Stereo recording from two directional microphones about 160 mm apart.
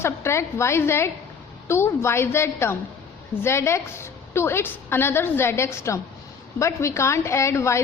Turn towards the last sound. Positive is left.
turn(degrees=15)  # may be behind; listen again after turning